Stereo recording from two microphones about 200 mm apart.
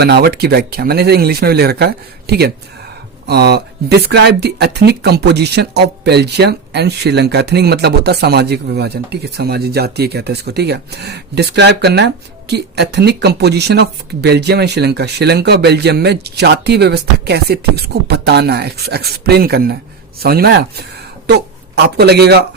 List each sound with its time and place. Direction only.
0.0 s speech: 55° right (ahead or behind)
21.9 s speech: 55° right (ahead or behind)